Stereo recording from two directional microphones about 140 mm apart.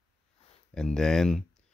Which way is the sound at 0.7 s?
5° left (ahead or behind).